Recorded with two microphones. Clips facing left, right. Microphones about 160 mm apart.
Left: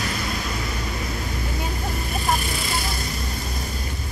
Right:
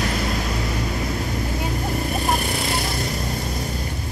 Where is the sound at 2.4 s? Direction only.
60° right (ahead or behind).